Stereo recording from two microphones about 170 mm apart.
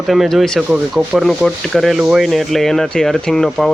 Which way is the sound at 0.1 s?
Centre (ahead or behind).